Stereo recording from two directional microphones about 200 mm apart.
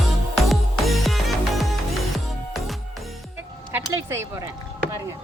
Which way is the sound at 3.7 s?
10° right (ahead or behind).